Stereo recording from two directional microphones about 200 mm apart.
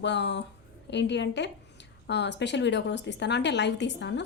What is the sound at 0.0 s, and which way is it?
A woman's voice, 60° left (ahead or behind).